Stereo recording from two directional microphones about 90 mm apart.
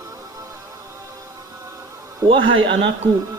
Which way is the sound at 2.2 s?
80° right.